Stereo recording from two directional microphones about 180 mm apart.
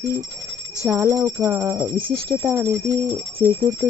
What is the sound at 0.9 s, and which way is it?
Speech, 15° right (ahead or behind).